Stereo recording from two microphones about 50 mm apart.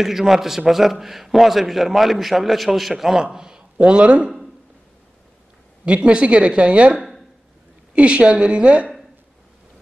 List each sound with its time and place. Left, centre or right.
0.0 s a man's voice: centre
5.9 s a woman's voice: right
7.0 s a sound: centre
7.9 s a woman's voice: right